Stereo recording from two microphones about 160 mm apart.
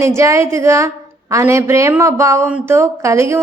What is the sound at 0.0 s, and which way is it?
A woman's voice, 20° right (ahead or behind).